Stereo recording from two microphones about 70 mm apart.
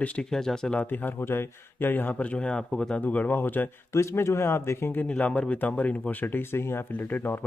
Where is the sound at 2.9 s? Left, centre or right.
Left.